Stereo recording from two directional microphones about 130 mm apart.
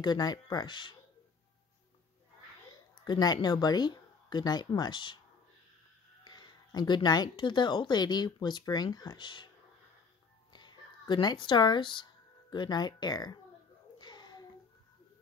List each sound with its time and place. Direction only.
0.0 s speech: 30° left (ahead or behind)
3.1 s speech: 35° left (ahead or behind)
6.2 s speech: 35° left (ahead or behind)
10.5 s speech: 35° left (ahead or behind)
13.9 s a sound: 35° left (ahead or behind)